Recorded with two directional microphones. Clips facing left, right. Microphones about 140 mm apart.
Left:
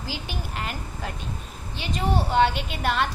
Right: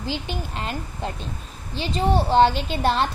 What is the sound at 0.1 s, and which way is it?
A woman's voice, 25° right (ahead or behind).